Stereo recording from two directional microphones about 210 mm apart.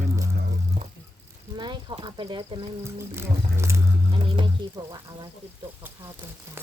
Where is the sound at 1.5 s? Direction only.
20° right (ahead or behind).